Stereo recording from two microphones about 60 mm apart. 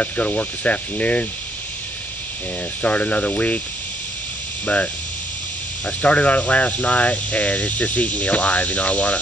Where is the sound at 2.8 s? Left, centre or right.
Left.